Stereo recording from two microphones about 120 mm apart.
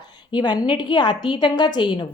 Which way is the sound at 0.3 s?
40° left (ahead or behind).